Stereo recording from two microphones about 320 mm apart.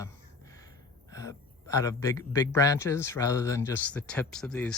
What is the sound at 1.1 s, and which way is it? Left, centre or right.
A man's voice, centre.